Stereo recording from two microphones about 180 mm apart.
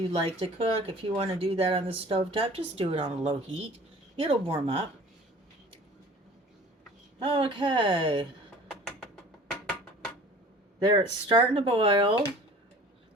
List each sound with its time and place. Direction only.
0.2 s speech: 30° right (ahead or behind)
7.2 s speech: 30° right (ahead or behind)
8.6 s a sound: centre (ahead or behind)
10.8 s speech: 25° right (ahead or behind)